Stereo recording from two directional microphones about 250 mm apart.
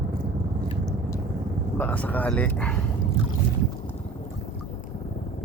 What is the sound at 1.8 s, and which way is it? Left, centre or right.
Speech, centre.